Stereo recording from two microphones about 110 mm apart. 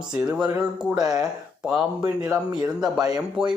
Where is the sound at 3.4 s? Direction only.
5° right (ahead or behind).